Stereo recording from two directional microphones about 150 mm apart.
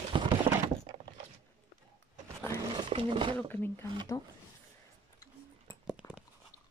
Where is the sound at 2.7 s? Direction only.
35° right (ahead or behind).